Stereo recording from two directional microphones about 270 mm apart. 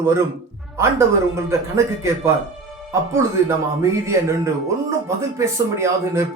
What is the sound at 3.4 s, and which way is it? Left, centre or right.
Speech, centre.